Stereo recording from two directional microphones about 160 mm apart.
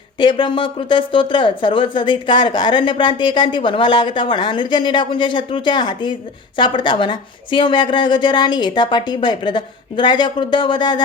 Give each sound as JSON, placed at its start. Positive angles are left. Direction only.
{"t": 0.2, "sound": "speech", "side_deg": 30}